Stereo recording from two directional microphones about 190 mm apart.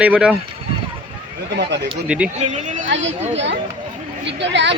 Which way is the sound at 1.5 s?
60° right (ahead or behind).